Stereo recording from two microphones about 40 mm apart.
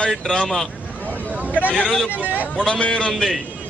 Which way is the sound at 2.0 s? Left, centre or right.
Right.